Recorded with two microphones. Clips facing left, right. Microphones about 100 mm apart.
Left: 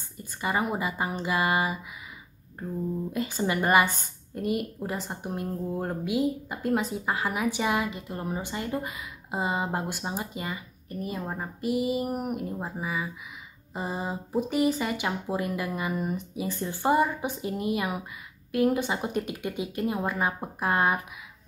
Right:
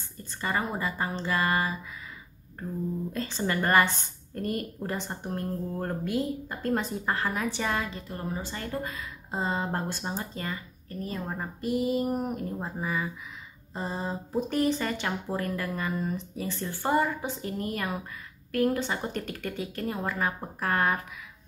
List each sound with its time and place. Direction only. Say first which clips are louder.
0.2 s a woman's voice: left 2 dB; 15° left (ahead or behind)
3.1 s a woman's voice: left 4 dB; 10° left (ahead or behind)